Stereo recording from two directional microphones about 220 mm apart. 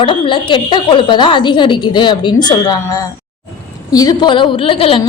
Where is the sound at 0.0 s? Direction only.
20° left (ahead or behind).